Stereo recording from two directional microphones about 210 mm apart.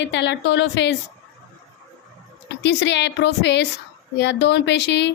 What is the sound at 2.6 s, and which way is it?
A woman's voice, 55° left (ahead or behind).